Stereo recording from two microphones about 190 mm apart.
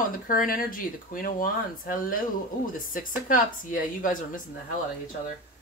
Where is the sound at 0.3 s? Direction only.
50° left (ahead or behind).